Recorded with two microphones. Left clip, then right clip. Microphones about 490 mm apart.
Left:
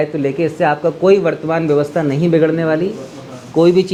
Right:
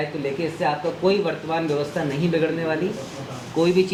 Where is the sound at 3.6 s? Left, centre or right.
Left.